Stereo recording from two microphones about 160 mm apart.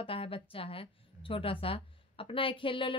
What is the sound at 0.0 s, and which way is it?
A woman's voice, 35° left (ahead or behind).